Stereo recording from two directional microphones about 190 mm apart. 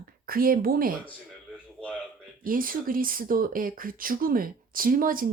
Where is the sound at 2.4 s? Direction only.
45° right (ahead or behind).